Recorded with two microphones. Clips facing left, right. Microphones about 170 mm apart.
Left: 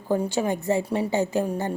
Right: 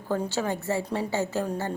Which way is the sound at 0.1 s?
15° left (ahead or behind).